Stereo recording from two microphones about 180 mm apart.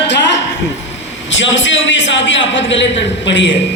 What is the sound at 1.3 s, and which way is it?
A man's voice, 90° left.